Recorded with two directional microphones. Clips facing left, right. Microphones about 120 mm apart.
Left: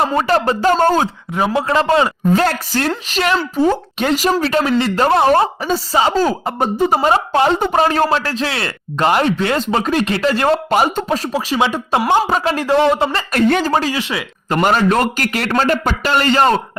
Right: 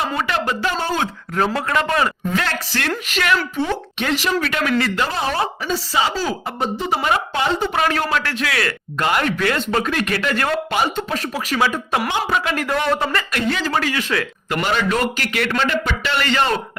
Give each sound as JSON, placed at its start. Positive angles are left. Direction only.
{"t": 0.1, "sound": "a man's voice", "side_deg": 35}
{"t": 1.5, "sound": "a man's voice", "side_deg": 25}
{"t": 5.0, "sound": "speech", "side_deg": 55}
{"t": 7.9, "sound": "speech", "side_deg": 30}
{"t": 10.8, "sound": "speech", "side_deg": 45}
{"t": 12.0, "sound": "a man's voice", "side_deg": 40}
{"t": 13.3, "sound": "speech", "side_deg": 45}
{"t": 13.7, "sound": "speech", "side_deg": 25}
{"t": 14.5, "sound": "a man's voice", "side_deg": 40}